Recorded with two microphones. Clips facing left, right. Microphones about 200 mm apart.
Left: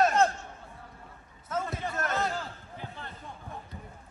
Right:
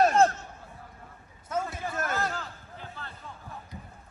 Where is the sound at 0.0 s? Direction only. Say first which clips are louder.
Right 3 dB; 30° right (ahead or behind).